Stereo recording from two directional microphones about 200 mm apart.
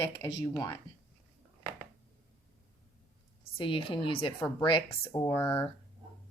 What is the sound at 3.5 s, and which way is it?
Speech, 25° left (ahead or behind).